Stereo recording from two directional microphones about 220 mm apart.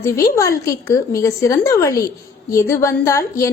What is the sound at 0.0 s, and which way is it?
Speech, 15° left (ahead or behind).